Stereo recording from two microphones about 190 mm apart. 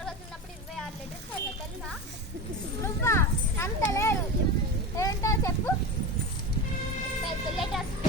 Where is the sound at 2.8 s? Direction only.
15° left (ahead or behind).